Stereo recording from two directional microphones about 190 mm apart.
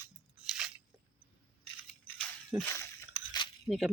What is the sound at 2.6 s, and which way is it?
Speech, 15° left (ahead or behind).